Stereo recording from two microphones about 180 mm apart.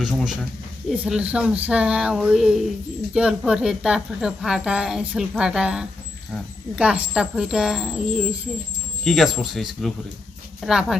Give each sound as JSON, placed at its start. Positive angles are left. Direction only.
{"t": 0.0, "sound": "a woman's voice", "side_deg": 0}